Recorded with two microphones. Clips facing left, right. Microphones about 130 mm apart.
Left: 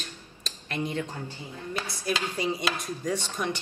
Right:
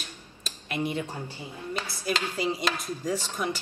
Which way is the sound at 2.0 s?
10° right (ahead or behind).